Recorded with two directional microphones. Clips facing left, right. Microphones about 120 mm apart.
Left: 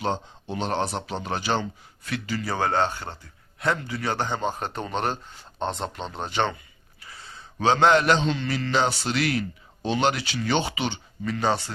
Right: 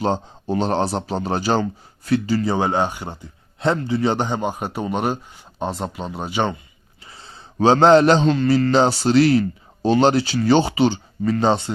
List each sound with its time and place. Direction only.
0.0 s speech: 40° right (ahead or behind)
2.4 s a man's voice: 20° right (ahead or behind)
3.6 s a man's voice: 25° right (ahead or behind); by 6.5 s 10° right (ahead or behind)
7.0 s a man's voice: 25° right (ahead or behind)